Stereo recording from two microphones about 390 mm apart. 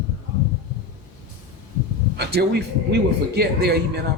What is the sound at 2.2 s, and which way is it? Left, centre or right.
Speech, right.